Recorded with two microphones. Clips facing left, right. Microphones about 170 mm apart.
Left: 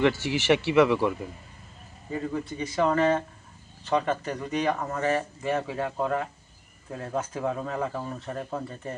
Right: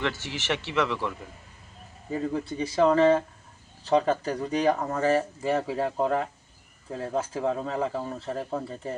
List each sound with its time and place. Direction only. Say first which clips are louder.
0.0 s speech: left 7 dB; 10° left (ahead or behind)
2.3 s speech: right 2 dB; 30° right (ahead or behind)